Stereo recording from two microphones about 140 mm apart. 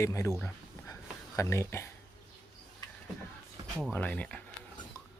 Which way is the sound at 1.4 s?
20° left (ahead or behind).